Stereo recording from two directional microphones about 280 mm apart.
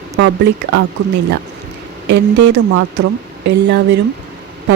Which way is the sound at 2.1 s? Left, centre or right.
Right.